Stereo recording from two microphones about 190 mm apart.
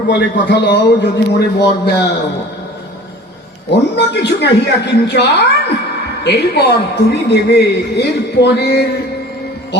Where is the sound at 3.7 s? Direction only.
65° left (ahead or behind).